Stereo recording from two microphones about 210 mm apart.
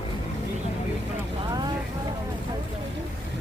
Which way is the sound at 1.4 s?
20° right (ahead or behind).